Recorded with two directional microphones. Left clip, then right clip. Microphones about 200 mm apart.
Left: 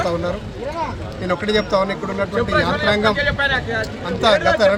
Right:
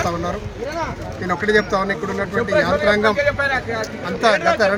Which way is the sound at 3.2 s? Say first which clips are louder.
Even; 25° right (ahead or behind).